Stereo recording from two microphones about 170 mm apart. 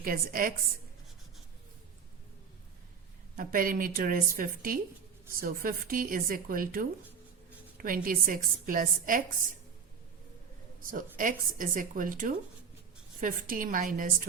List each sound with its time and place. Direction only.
0.0 s a woman's voice: 55° right (ahead or behind)
3.3 s a woman's voice: 55° right (ahead or behind)
10.8 s a woman's voice: 50° right (ahead or behind)